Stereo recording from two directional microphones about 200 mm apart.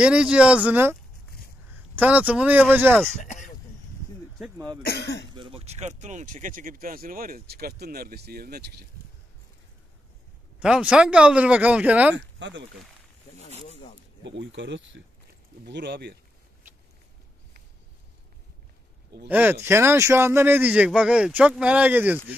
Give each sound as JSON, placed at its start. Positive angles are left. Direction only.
{"t": 0.0, "sound": "speech", "side_deg": -5}
{"t": 2.0, "sound": "speech", "side_deg": -5}
{"t": 3.3, "sound": "a sound", "side_deg": 40}
{"t": 4.8, "sound": "speech", "side_deg": 55}
{"t": 5.3, "sound": "speech", "side_deg": -25}
{"t": 10.6, "sound": "speech", "side_deg": -5}
{"t": 12.4, "sound": "speech", "side_deg": -60}
{"t": 13.7, "sound": "zipper", "side_deg": 30}
{"t": 14.2, "sound": "speech", "side_deg": -65}
{"t": 19.2, "sound": "speech", "side_deg": -10}